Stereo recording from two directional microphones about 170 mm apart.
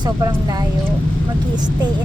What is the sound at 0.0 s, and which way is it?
Speech, 25° right (ahead or behind).